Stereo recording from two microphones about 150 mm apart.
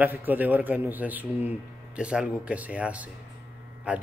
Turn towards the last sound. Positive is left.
turn(degrees=-10)  # may be behind; listen again after turning